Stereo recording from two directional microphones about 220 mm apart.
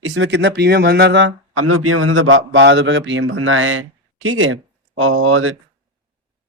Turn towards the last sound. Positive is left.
turn(degrees=-70)  # may be behind; listen again after turning